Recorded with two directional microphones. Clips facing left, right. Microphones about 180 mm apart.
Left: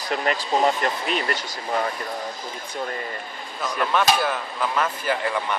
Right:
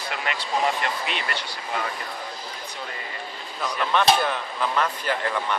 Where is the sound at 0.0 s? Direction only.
40° left (ahead or behind).